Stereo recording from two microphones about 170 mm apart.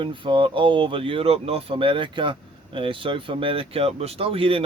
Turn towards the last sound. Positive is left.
turn(degrees=-30)  # may be behind; listen again after turning